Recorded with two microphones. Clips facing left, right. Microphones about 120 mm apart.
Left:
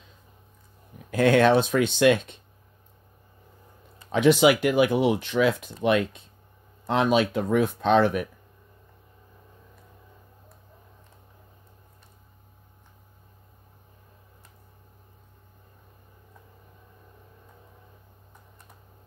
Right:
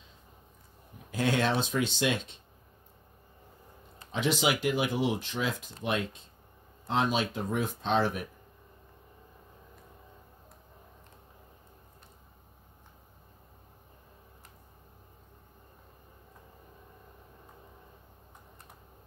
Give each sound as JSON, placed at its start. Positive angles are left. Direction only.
{"t": 1.1, "sound": "speech", "side_deg": 60}
{"t": 4.1, "sound": "speech", "side_deg": 60}